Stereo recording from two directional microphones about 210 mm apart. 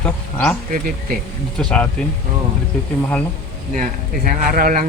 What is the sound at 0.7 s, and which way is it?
Speech, 40° right (ahead or behind).